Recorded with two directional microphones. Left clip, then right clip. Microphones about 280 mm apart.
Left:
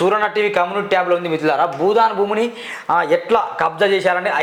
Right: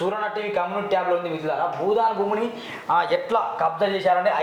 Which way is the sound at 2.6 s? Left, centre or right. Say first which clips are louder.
Left 4 dB; left.